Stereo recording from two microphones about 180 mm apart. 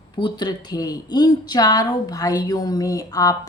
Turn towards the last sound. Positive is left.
turn(degrees=20)  # may be behind; listen again after turning